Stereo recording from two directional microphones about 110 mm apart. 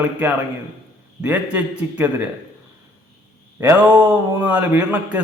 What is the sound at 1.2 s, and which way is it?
A man's voice, 15° right (ahead or behind).